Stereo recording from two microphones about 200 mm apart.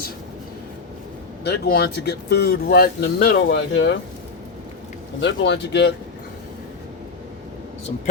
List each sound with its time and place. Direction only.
1.5 s speech: 50° left (ahead or behind); by 3.9 s 70° left (ahead or behind)
5.2 s speech: 65° left (ahead or behind)